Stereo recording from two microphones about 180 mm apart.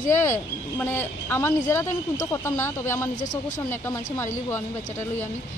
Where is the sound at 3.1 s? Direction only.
45° left (ahead or behind).